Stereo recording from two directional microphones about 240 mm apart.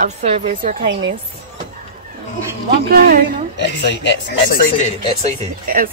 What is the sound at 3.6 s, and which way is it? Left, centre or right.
Speech, left.